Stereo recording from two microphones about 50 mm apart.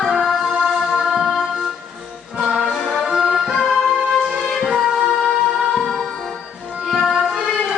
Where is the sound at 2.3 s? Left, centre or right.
Centre.